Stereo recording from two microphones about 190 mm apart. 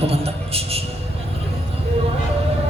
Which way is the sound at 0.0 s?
30° right (ahead or behind).